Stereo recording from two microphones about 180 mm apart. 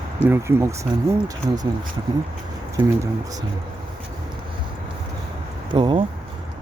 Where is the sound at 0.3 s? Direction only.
15° right (ahead or behind).